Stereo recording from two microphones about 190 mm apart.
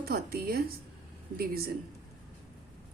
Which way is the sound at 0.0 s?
55° right (ahead or behind).